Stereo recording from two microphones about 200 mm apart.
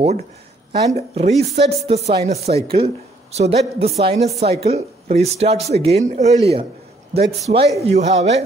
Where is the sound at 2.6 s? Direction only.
30° right (ahead or behind).